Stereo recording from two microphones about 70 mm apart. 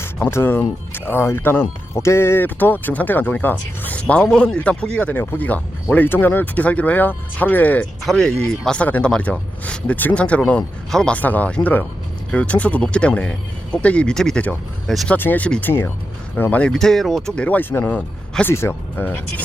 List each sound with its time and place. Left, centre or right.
0.3 s speech: left; by 5.1 s centre
5.1 s speech: left
5.4 s speech: left
8.0 s speech: centre
11.2 s speech: left; by 15.0 s centre
15.2 s speech: left
16.4 s speech: centre
16.7 s speech: centre
17.6 s speech: left
18.4 s speech: left